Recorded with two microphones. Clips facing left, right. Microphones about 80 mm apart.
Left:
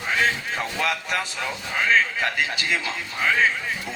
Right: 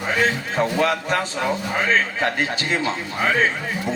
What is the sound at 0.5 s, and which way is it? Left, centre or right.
A man's voice, right.